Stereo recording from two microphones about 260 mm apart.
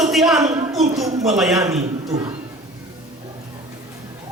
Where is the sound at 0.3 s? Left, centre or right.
Centre.